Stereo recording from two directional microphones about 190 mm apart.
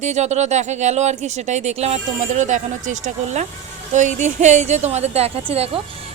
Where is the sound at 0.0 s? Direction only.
35° right (ahead or behind).